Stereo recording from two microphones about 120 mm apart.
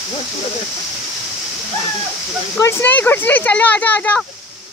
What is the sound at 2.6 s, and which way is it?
Speech, 20° left (ahead or behind).